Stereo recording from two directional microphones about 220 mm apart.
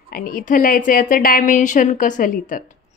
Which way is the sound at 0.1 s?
40° left (ahead or behind).